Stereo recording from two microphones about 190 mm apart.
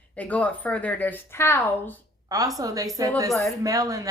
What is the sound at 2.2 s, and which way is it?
A woman's voice, 20° right (ahead or behind).